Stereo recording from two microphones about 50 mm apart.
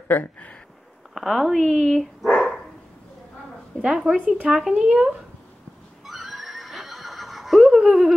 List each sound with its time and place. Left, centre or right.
0.1 s speech: left
1.1 s speech: centre
3.8 s speech: centre
6.0 s neigh: centre